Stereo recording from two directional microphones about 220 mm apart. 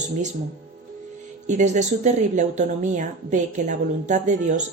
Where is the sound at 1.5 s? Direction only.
35° right (ahead or behind).